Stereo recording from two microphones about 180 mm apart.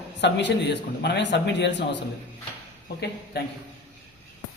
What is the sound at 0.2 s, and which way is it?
A man's voice, 75° left (ahead or behind).